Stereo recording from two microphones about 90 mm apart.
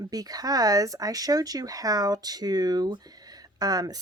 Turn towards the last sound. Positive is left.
turn(degrees=-45)  # may be behind; listen again after turning